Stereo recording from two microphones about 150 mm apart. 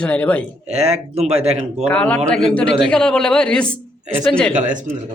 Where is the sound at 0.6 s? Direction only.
45° right (ahead or behind).